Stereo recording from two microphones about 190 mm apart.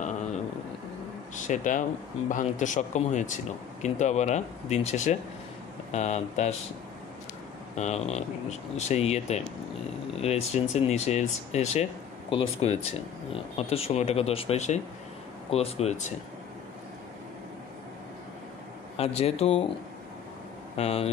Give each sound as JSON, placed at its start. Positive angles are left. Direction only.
{"t": 1.3, "sound": "speech", "side_deg": 40}
{"t": 7.7, "sound": "speech", "side_deg": 35}
{"t": 18.9, "sound": "speech", "side_deg": 30}
{"t": 20.7, "sound": "speech", "side_deg": 35}